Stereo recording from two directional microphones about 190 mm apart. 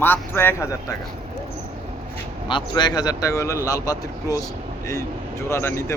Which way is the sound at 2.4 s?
25° left (ahead or behind).